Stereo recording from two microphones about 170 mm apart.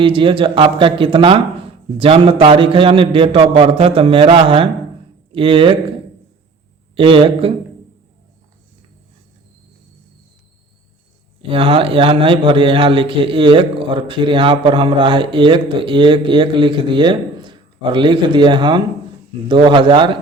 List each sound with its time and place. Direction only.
0.0 s a man's voice: 30° right (ahead or behind)
6.9 s a man's voice: 30° right (ahead or behind)
11.4 s a man's voice: 30° right (ahead or behind)